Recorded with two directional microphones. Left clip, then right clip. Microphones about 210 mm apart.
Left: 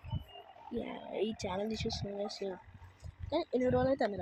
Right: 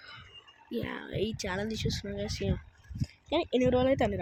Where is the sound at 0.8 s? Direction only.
25° right (ahead or behind).